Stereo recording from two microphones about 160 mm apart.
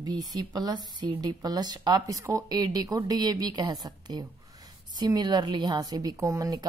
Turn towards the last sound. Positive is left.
turn(degrees=-20)  # may be behind; listen again after turning